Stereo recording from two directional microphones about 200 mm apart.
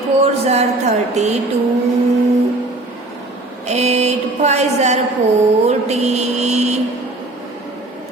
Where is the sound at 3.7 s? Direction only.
35° right (ahead or behind).